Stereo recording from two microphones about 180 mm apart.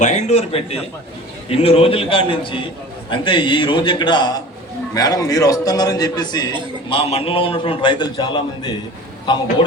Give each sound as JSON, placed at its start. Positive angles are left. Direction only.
{"t": 0.0, "sound": "a man's voice", "side_deg": 40}
{"t": 6.9, "sound": "a man's voice", "side_deg": 35}